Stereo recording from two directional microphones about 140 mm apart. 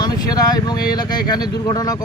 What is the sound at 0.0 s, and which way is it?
Speech, 30° left (ahead or behind).